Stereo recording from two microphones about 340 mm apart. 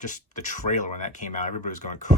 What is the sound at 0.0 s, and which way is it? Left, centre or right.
Speech, left.